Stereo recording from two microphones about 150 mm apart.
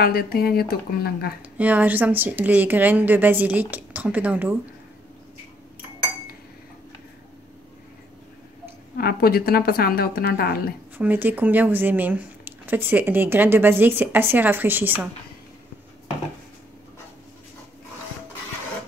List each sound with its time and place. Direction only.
0.0 s a woman's voice: 90° left
1.6 s speech: 10° right (ahead or behind)
8.9 s a woman's voice: 90° left
11.0 s speech: 10° right (ahead or behind)